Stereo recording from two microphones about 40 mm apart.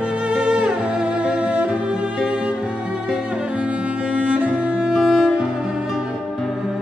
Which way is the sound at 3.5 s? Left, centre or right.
Right.